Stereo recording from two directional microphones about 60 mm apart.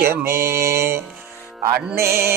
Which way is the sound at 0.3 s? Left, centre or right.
Right.